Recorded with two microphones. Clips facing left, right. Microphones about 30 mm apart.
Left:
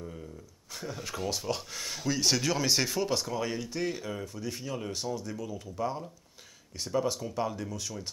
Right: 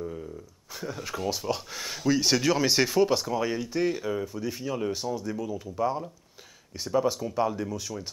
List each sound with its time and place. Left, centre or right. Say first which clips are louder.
0.7 s speech: right 3 dB; centre